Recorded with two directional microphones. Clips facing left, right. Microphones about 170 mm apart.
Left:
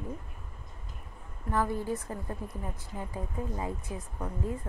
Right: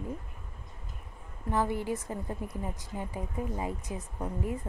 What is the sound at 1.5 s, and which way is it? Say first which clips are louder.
A woman's voice: even; 20° right (ahead or behind).